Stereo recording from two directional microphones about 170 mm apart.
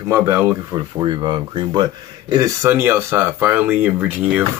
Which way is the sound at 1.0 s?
25° right (ahead or behind).